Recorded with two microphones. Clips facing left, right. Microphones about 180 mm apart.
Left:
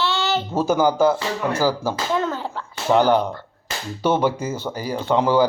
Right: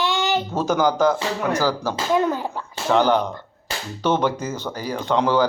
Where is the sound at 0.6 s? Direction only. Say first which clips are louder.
Left 2 dB; 10° left (ahead or behind).